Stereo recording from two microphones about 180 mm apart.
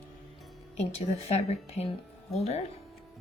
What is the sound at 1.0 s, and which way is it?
Speech, 35° left (ahead or behind).